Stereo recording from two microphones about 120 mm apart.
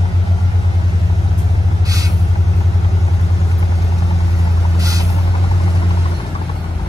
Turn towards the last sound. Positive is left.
turn(degrees=-30)  # may be behind; listen again after turning